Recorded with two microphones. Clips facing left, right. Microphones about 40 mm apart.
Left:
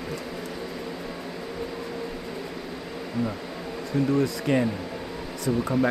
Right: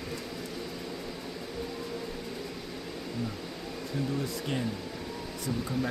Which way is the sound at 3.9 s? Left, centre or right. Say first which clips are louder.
Left 9 dB; left.